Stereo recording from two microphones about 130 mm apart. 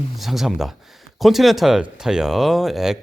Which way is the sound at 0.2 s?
Centre (ahead or behind).